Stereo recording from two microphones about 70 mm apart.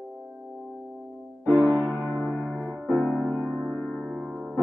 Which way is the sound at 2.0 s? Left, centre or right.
Left.